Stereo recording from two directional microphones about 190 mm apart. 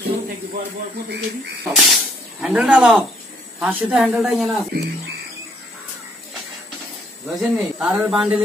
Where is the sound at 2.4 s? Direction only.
5° right (ahead or behind).